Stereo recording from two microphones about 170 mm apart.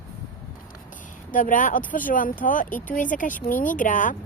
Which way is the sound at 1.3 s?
50° left (ahead or behind).